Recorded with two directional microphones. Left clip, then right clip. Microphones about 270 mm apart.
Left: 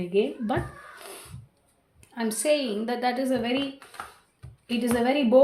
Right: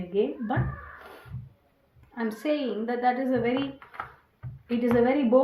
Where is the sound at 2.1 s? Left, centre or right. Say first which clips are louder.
Left 4 dB; left.